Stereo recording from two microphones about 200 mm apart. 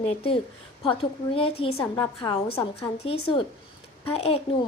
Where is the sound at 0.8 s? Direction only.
25° left (ahead or behind).